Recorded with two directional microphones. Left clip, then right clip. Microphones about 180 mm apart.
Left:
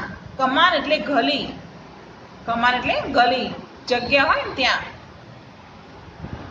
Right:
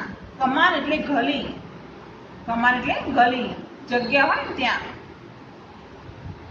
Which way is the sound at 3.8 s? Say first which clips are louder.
Left 2 dB; 50° left (ahead or behind).